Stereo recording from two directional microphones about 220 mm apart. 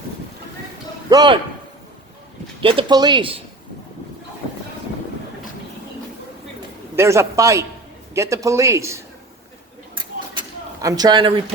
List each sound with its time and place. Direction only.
1.1 s speech: 20° right (ahead or behind)
2.6 s speech: 25° right (ahead or behind)
6.9 s speech: 10° right (ahead or behind)
10.8 s a man's voice: 15° right (ahead or behind)